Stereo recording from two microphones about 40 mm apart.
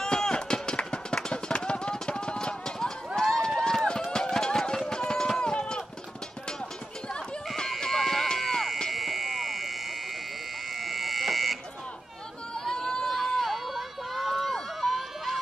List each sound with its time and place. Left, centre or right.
0.0 s run: centre
7.9 s run: centre
8.4 s chop: centre
8.9 s fire alarm: centre
12.5 s run: centre
14.8 s a sound: centre